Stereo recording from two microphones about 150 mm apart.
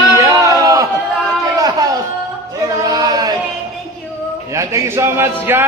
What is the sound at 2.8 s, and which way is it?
Speech, 25° right (ahead or behind).